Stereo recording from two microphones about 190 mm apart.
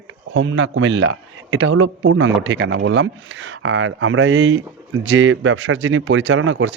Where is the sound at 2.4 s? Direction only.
70° right (ahead or behind).